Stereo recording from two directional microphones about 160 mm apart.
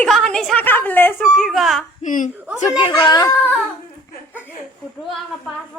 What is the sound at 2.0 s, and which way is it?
Speech, 55° left (ahead or behind).